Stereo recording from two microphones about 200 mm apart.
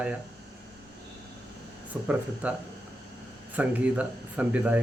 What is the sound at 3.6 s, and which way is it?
Speech, 5° right (ahead or behind).